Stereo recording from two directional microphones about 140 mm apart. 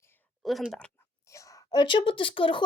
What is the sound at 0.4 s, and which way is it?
Speech, centre (ahead or behind).